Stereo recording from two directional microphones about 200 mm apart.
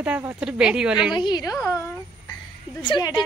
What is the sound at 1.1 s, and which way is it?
A woman's voice, 20° left (ahead or behind).